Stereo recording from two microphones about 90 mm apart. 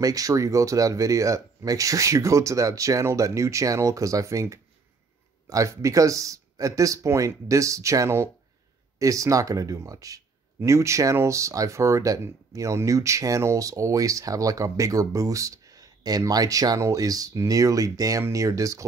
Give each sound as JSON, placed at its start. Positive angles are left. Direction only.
{"t": 0.0, "sound": "speech", "side_deg": -40}